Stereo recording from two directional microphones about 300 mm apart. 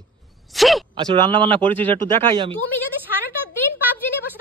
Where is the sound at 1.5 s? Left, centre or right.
Centre.